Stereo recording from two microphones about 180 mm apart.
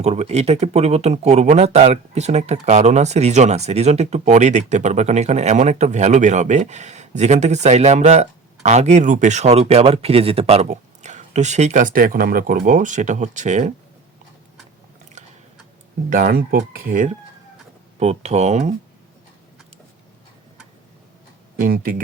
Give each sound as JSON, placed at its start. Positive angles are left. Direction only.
{"t": 0.0, "sound": "speech", "side_deg": -35}
{"t": 16.0, "sound": "speech", "side_deg": -55}
{"t": 18.0, "sound": "speech", "side_deg": -35}
{"t": 21.5, "sound": "speech", "side_deg": -50}